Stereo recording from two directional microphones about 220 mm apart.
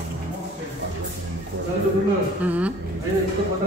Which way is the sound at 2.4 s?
5° right (ahead or behind).